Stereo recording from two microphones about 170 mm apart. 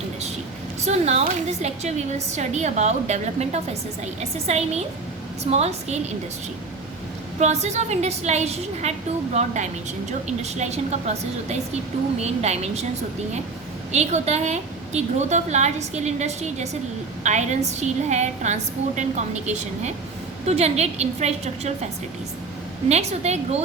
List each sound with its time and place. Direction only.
0.8 s a woman's voice: 40° right (ahead or behind)
7.3 s a woman's voice: 40° right (ahead or behind)
13.9 s a woman's voice: 40° right (ahead or behind)
22.9 s a woman's voice: 40° right (ahead or behind)